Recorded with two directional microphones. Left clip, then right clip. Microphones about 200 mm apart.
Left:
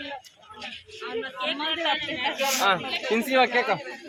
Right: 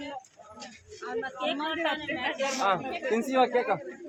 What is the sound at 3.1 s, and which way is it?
Speech, 45° left (ahead or behind).